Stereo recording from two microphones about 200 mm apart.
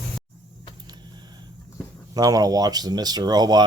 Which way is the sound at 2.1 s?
20° right (ahead or behind).